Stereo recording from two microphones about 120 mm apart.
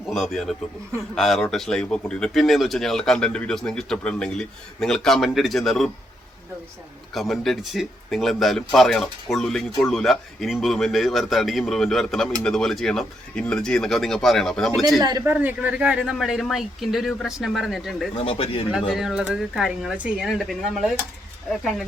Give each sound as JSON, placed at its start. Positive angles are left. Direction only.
{"t": 0.1, "sound": "speech", "side_deg": 0}
{"t": 7.1, "sound": "speech", "side_deg": 0}
{"t": 15.2, "sound": "speech", "side_deg": -15}
{"t": 18.1, "sound": "speech", "side_deg": 50}
{"t": 18.7, "sound": "speech", "side_deg": -5}